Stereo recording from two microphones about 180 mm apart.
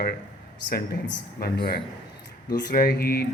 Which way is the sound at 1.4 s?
60° left (ahead or behind).